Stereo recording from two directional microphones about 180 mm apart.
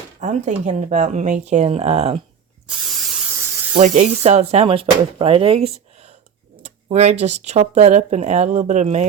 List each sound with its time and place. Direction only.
0.2 s speech: 40° right (ahead or behind)
2.6 s spray: centre (ahead or behind)
3.8 s speech: 40° right (ahead or behind)